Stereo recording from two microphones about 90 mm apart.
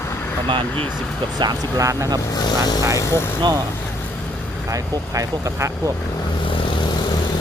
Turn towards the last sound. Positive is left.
turn(degrees=-40)  # may be behind; listen again after turning